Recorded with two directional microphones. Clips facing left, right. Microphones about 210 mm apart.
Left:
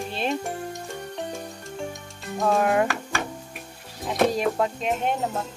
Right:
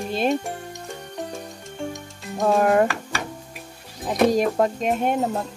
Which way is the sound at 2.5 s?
45° right (ahead or behind).